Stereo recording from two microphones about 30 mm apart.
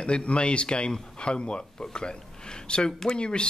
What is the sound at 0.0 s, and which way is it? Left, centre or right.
A man's voice, left.